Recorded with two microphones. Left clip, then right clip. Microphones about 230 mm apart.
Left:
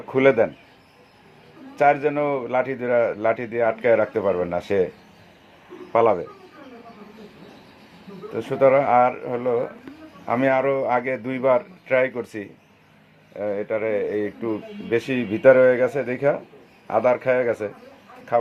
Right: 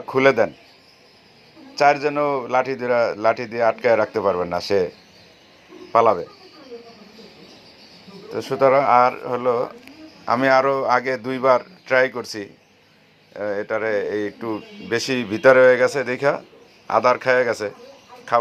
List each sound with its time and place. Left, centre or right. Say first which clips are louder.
0.1 s a man's voice: right 1 dB; centre
1.8 s a man's voice: right 2 dB; centre
5.9 s a man's voice: right 2 dB; centre
8.3 s speech: right 1 dB; centre